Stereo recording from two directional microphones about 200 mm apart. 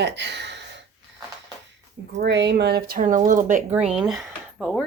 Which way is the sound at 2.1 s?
60° right (ahead or behind).